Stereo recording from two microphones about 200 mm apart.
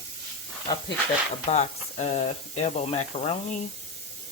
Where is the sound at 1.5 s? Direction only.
35° left (ahead or behind).